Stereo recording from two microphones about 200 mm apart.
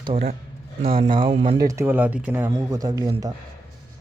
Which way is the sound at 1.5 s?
15° right (ahead or behind).